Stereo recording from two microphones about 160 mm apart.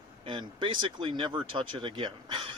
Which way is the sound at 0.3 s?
30° right (ahead or behind).